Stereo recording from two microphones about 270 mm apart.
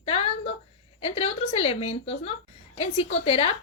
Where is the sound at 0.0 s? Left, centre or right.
Left.